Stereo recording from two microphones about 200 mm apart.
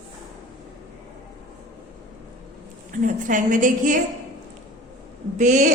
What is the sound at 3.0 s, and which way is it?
Speech, 40° right (ahead or behind).